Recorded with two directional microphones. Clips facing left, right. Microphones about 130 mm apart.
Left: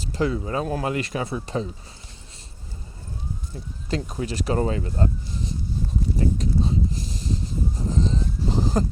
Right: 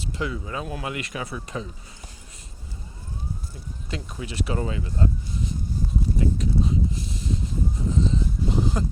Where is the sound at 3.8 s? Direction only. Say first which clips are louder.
Left 7 dB; 40° left (ahead or behind).